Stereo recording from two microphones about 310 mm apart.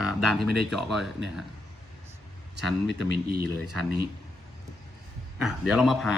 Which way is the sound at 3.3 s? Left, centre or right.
Right.